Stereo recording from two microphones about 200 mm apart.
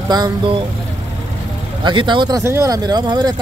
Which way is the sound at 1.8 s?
25° right (ahead or behind).